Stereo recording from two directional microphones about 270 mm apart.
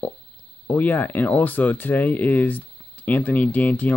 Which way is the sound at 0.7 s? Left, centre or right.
Centre.